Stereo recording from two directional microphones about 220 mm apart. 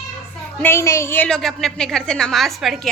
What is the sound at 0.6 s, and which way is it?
A woman's voice, 10° left (ahead or behind).